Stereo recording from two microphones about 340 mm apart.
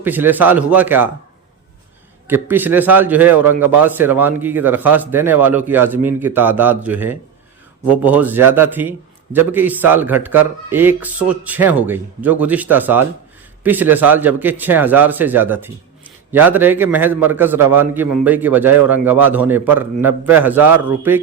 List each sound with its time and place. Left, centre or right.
0.0 s a man's voice: centre
2.2 s a man's voice: centre